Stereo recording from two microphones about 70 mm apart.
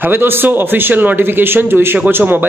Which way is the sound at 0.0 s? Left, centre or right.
Right.